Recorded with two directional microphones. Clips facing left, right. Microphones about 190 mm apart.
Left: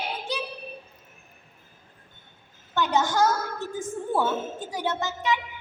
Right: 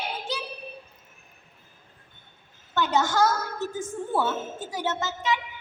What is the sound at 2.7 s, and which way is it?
Speech, 15° left (ahead or behind).